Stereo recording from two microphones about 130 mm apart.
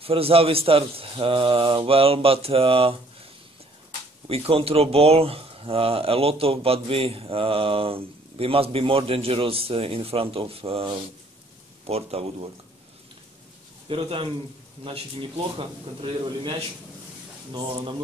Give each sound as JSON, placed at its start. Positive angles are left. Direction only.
{"t": 0.0, "sound": "speech", "side_deg": -45}
{"t": 4.3, "sound": "speech", "side_deg": -50}
{"t": 13.8, "sound": "speech", "side_deg": -45}
{"t": 17.5, "sound": "speech", "side_deg": -40}